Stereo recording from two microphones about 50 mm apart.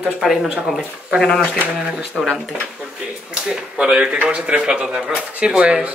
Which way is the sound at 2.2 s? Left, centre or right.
Centre.